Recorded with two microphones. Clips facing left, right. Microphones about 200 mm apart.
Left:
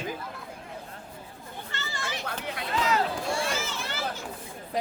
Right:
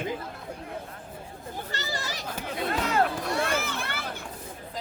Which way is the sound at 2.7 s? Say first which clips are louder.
Right 1 dB; 55° right (ahead or behind).